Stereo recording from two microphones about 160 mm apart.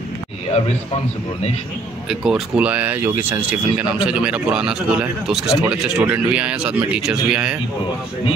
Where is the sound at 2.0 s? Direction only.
Centre (ahead or behind).